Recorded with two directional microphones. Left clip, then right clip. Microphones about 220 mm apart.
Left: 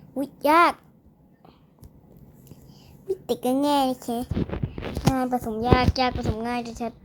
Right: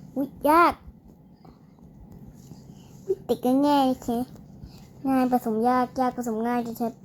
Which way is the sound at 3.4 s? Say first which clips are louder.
Right 1 dB; 20° left (ahead or behind).